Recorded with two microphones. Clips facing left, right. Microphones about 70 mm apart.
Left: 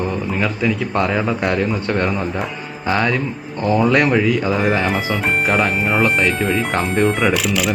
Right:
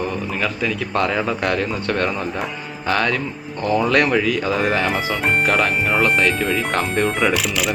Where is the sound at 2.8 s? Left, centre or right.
Centre.